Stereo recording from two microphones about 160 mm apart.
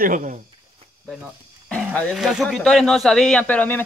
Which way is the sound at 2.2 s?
Centre (ahead or behind).